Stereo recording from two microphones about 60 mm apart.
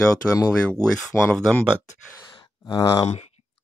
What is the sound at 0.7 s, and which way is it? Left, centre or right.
Speech, centre.